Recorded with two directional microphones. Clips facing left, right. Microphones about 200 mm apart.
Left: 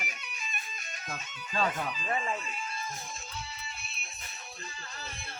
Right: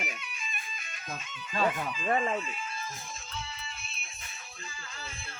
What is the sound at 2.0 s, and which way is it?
Speech, 40° right (ahead or behind).